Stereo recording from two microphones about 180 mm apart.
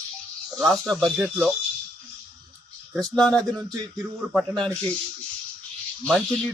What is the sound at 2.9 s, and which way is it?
Speech, 5° left (ahead or behind).